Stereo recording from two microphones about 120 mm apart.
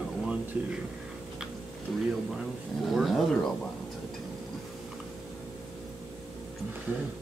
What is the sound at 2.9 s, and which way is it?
Speech, centre (ahead or behind).